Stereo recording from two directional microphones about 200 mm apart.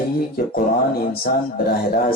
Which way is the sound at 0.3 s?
50° left (ahead or behind).